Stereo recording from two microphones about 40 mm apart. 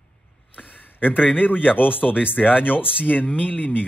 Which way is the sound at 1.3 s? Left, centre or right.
Left.